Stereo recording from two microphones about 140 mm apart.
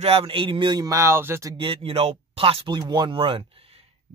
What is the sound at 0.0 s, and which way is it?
Speech, 45° right (ahead or behind).